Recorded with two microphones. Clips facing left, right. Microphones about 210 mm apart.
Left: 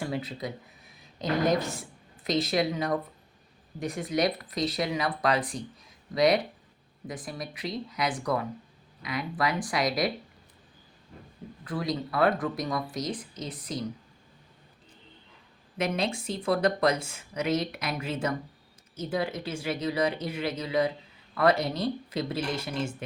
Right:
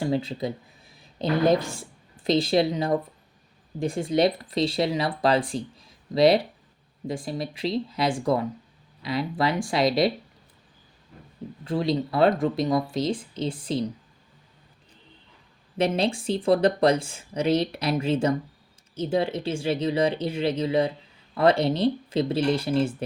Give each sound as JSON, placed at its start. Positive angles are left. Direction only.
{"t": 0.0, "sound": "a woman's voice", "side_deg": -30}
{"t": 11.6, "sound": "speech", "side_deg": -25}
{"t": 15.8, "sound": "speech", "side_deg": -30}